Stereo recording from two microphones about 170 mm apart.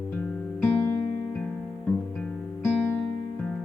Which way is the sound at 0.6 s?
10° left (ahead or behind).